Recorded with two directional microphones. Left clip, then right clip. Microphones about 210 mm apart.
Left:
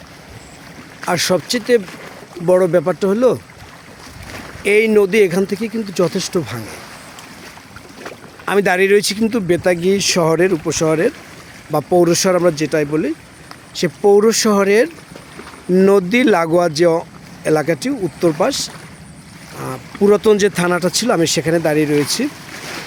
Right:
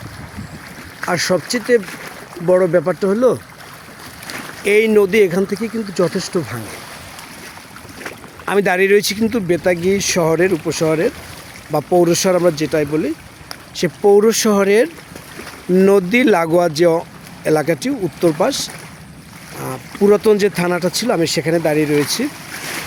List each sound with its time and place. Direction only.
1.0 s speech: 5° left (ahead or behind)
4.6 s speech: 5° left (ahead or behind)
8.4 s speech: 5° left (ahead or behind)
22.6 s boat: 30° right (ahead or behind)